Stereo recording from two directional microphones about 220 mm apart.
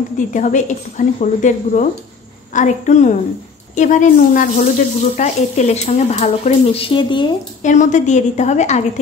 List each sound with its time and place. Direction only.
0.3 s speech: 35° left (ahead or behind)
7.6 s speech: 35° left (ahead or behind)